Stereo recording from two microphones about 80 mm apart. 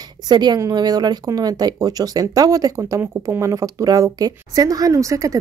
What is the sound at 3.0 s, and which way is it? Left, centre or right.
Speech, right.